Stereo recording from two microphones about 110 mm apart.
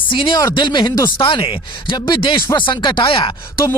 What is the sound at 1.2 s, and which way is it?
Speech, 50° left (ahead or behind).